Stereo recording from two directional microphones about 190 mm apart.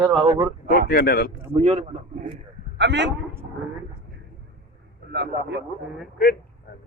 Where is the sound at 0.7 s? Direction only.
50° left (ahead or behind).